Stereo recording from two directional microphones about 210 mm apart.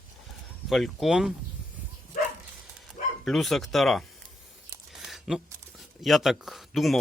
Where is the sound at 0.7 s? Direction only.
Centre (ahead or behind).